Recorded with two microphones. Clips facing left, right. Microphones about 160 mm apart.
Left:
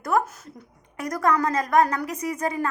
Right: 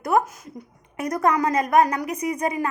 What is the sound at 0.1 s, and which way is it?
A woman's voice, 15° right (ahead or behind).